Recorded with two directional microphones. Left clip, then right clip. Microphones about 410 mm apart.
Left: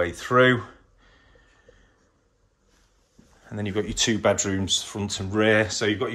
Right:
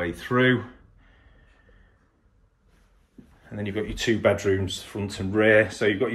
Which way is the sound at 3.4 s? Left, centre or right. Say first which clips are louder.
Left 2 dB; centre.